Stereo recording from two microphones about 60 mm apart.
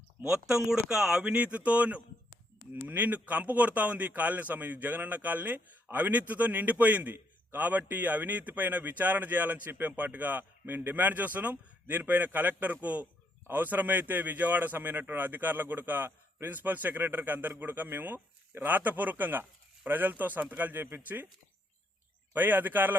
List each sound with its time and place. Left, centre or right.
0.3 s speech: centre
1.2 s speech: right
22.3 s speech: right